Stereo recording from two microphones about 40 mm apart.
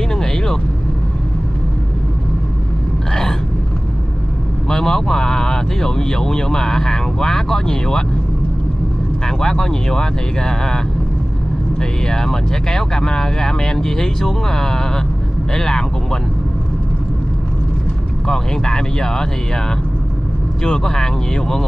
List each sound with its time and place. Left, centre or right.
0.1 s vehicle: centre
4.6 s speech: centre
9.4 s speech: centre
11.8 s speech: centre
18.2 s speech: centre
20.6 s speech: centre